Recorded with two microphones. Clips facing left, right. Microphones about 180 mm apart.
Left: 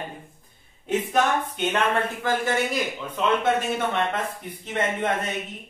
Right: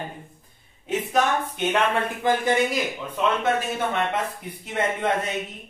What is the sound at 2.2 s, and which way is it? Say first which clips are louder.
Speech: right 5 dB; 15° right (ahead or behind).